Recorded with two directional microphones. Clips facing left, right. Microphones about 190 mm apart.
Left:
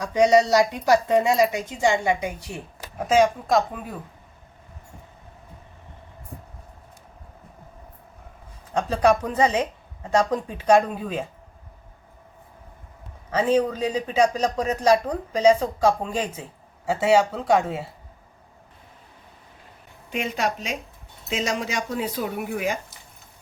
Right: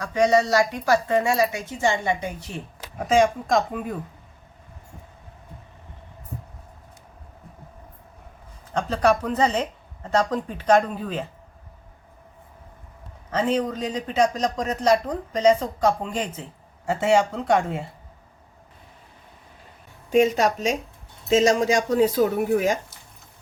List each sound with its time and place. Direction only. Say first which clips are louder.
0.0 s speech: left 2 dB; 20° left (ahead or behind)
8.7 s speech: left 1 dB; 10° left (ahead or behind)
13.3 s speech: left 2 dB; 10° left (ahead or behind)
20.1 s speech: right 8 dB; 40° right (ahead or behind)